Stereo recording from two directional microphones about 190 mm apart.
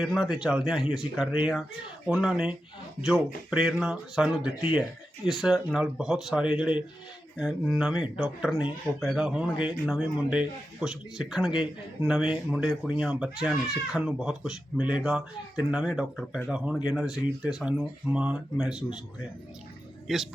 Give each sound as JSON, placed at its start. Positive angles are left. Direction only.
{"t": 0.0, "sound": "speech", "side_deg": 0}